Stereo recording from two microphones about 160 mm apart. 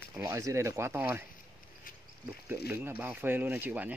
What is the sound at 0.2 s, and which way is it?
Speech, 20° right (ahead or behind).